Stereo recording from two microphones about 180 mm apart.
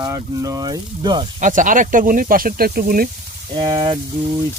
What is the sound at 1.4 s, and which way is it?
Speech, 45° right (ahead or behind).